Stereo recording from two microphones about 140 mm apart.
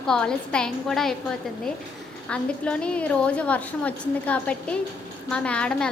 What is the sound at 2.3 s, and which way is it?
A woman's voice, 10° left (ahead or behind).